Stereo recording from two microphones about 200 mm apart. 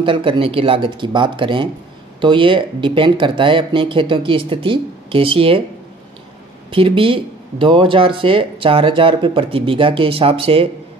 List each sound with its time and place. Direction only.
0.0 s speech: 25° right (ahead or behind)
6.7 s speech: 25° right (ahead or behind)